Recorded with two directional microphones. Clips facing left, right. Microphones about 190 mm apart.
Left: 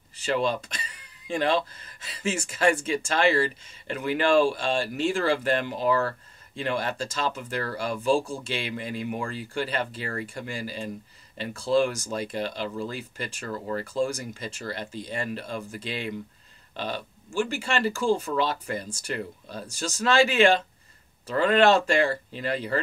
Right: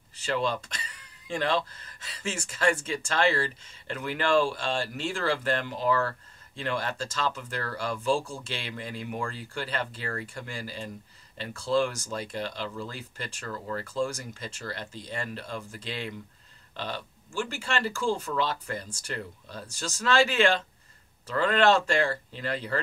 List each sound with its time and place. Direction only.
0.2 s speech: 15° left (ahead or behind)